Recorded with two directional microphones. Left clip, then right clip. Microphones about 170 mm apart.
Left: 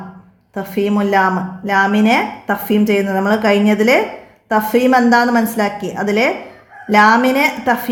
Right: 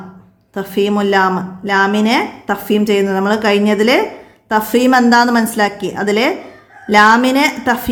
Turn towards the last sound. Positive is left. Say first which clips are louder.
# right 1 dB
turn(degrees=-20)  # may be behind; listen again after turning